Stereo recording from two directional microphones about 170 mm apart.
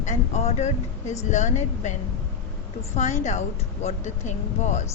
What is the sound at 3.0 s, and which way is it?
Speech, 45° left (ahead or behind).